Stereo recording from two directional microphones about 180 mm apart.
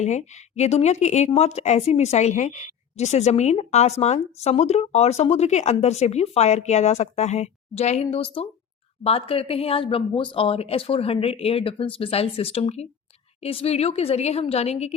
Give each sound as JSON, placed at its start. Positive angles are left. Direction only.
{"t": 0.0, "sound": "speech", "side_deg": 40}